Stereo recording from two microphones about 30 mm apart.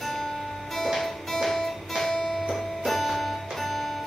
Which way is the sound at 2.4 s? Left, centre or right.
Centre.